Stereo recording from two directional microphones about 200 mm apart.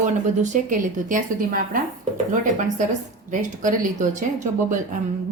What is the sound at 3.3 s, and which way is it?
Speech, 40° right (ahead or behind).